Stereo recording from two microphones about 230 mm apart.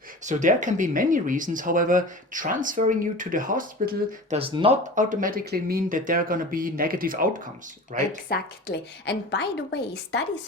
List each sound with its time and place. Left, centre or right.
0.3 s speech: right
4.4 s speech: right
5.0 s speech: right
8.3 s a woman's voice: left